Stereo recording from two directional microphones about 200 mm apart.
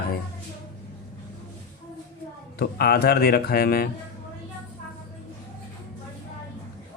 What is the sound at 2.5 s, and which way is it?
Speech, 50° left (ahead or behind).